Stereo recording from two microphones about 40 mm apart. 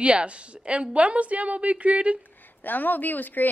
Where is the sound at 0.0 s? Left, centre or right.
Right.